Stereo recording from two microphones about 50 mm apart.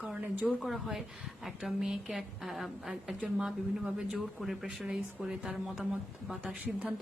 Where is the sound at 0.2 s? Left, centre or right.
Right.